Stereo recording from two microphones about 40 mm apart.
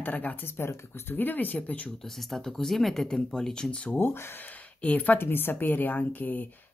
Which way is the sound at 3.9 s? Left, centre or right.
Left.